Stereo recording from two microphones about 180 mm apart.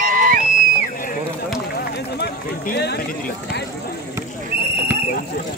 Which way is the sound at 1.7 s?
65° left (ahead or behind).